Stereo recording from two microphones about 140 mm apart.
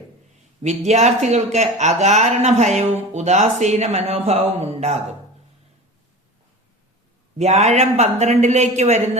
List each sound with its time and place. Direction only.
0.6 s speech: 55° right (ahead or behind)
7.3 s speech: 50° right (ahead or behind)